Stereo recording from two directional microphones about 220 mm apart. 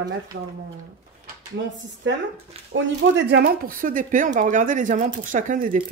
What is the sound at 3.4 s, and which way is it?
Speech, 40° right (ahead or behind).